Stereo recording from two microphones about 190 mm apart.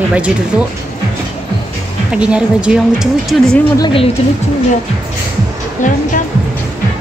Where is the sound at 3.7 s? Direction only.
25° left (ahead or behind).